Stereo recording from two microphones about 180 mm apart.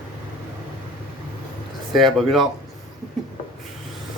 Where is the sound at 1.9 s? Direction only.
Centre (ahead or behind).